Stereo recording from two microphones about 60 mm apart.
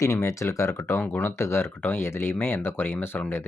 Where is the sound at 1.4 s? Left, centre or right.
Left.